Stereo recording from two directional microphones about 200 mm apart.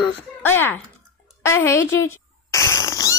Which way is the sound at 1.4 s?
15° left (ahead or behind).